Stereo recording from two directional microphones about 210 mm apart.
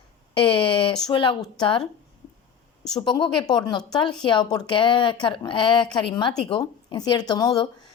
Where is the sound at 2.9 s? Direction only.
20° left (ahead or behind).